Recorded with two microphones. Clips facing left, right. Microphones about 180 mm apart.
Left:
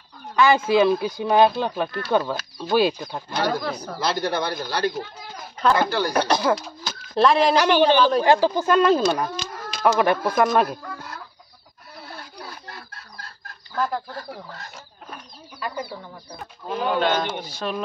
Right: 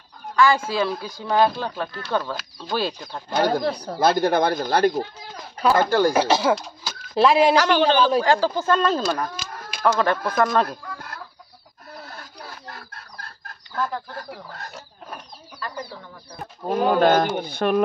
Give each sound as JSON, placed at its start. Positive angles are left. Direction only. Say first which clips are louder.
{"t": 0.4, "sound": "speech", "louder": "left 3 dB", "side_deg": 20}
{"t": 3.3, "sound": "speech", "louder": "right 4 dB", "side_deg": -45}
{"t": 4.0, "sound": "speech", "louder": "right 6 dB", "side_deg": -50}
{"t": 6.1, "sound": "speech", "louder": "right 1 dB", "side_deg": -5}
{"t": 7.5, "sound": "speech", "louder": "left 1 dB", "side_deg": 15}
{"t": 9.4, "sound": "a sound", "louder": "left 3 dB", "side_deg": -10}
{"t": 9.9, "sound": "speech", "louder": "left 1 dB", "side_deg": 10}
{"t": 13.7, "sound": "speech", "louder": "left 2 dB", "side_deg": 10}
{"t": 15.6, "sound": "speech", "louder": "left 3 dB", "side_deg": 10}
{"t": 16.6, "sound": "speech", "louder": "right 5 dB", "side_deg": -45}